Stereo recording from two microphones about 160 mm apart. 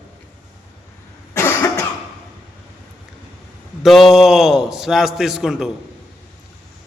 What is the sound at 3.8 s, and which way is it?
A man's voice, centre (ahead or behind).